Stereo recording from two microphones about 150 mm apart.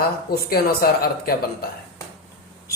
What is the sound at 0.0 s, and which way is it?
Speech, 90° left.